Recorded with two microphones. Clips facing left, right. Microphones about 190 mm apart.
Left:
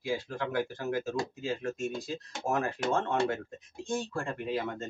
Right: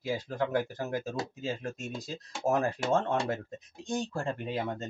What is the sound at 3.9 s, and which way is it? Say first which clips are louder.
Speech: right 1 dB; 25° right (ahead or behind).